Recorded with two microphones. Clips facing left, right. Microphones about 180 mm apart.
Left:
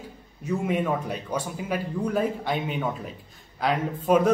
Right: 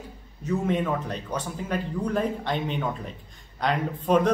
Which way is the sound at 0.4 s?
10° left (ahead or behind).